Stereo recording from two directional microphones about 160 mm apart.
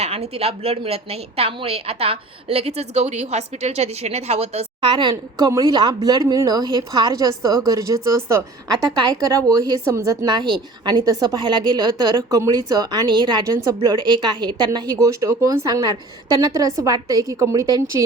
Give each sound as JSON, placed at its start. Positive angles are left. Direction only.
{"t": 0.0, "sound": "a woman's voice", "side_deg": -40}